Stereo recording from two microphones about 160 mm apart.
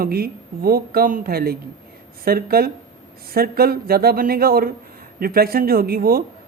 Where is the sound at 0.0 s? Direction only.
70° right (ahead or behind).